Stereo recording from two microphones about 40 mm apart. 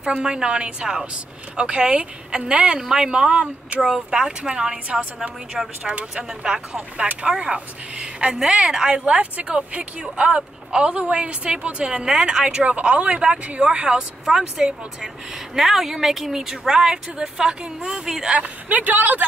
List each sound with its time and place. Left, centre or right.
0.0 s speech: right
12.6 s speech: right
15.5 s speech: centre
18.4 s speech: right